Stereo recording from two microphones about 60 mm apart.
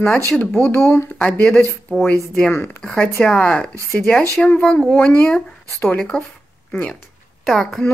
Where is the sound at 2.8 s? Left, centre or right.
Centre.